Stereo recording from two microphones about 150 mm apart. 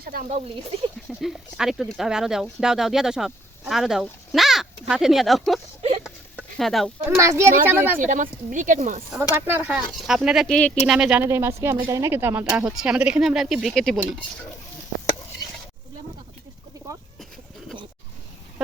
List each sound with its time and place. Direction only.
0.0 s speech: 80° right
0.3 s speech: 45° right (ahead or behind)
1.2 s speech: 5° right (ahead or behind)
7.2 s a child's voice: 20° right (ahead or behind)
7.9 s speech: 60° right (ahead or behind)
9.3 s a woman's voice: 15° right (ahead or behind)
10.0 s speech: centre (ahead or behind)
10.9 s speech: 5° right (ahead or behind)
11.2 s a woman's voice: 15° right (ahead or behind); by 14.2 s centre (ahead or behind)